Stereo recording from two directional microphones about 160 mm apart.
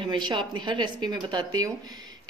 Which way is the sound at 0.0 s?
30° right (ahead or behind).